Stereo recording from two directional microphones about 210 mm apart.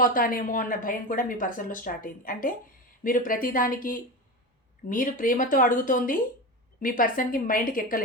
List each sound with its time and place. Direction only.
0.0 s speech: 40° left (ahead or behind)